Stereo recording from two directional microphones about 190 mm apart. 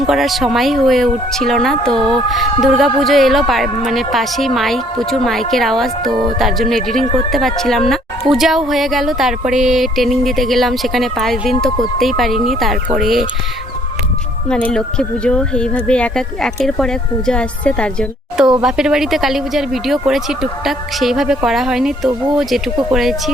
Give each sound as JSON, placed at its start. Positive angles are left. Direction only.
{"t": 0.1, "sound": "speech", "side_deg": 0}
{"t": 6.1, "sound": "music", "side_deg": -25}
{"t": 6.4, "sound": "speech", "side_deg": 0}
{"t": 14.4, "sound": "speech", "side_deg": 5}